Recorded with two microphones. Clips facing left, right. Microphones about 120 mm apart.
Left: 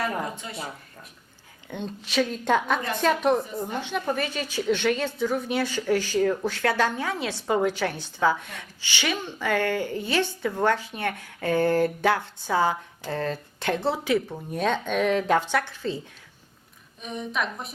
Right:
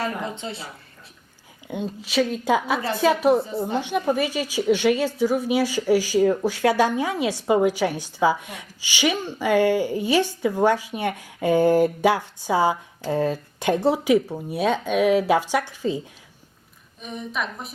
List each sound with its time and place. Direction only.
1.6 s a woman's voice: 10° right (ahead or behind)
3.7 s a woman's voice: 15° right (ahead or behind)
17.0 s a woman's voice: centre (ahead or behind)